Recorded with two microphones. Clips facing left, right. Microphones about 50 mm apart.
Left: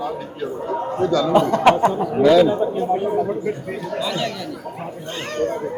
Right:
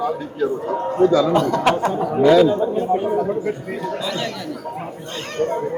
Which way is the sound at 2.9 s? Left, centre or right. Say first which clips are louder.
Right 1 dB; centre.